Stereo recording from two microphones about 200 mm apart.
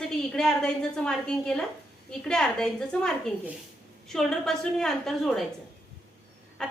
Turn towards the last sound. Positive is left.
turn(degrees=5)  # may be behind; listen again after turning